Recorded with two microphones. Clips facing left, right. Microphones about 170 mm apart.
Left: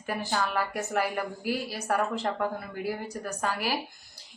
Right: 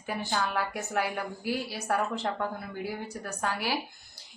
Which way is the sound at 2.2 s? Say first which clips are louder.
Left 2 dB; 5° left (ahead or behind).